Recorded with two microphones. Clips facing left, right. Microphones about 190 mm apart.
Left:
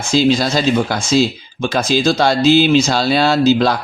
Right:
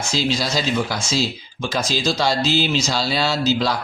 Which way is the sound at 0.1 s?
55° left (ahead or behind).